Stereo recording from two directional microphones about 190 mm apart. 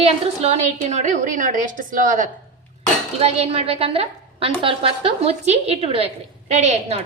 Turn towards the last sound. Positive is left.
turn(degrees=-35)  # may be behind; listen again after turning